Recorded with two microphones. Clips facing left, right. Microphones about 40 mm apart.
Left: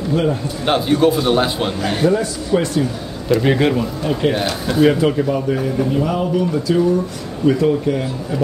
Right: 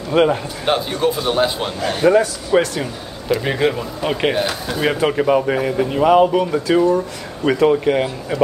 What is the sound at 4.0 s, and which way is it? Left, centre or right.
Speech, right.